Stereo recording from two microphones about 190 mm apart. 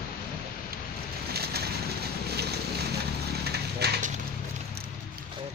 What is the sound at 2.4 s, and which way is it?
Boat, 60° right (ahead or behind).